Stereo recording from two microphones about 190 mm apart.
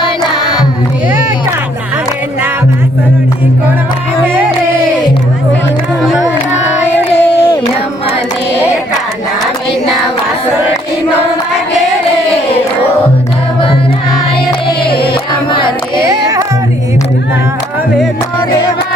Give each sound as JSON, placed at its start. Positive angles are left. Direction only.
{"t": 6.9, "sound": "crowd", "side_deg": 10}
{"t": 15.1, "sound": "carnatic music", "side_deg": 25}
{"t": 16.0, "sound": "music", "side_deg": -15}